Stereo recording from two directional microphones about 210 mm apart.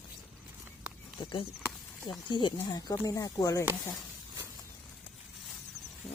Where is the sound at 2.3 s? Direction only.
20° left (ahead or behind).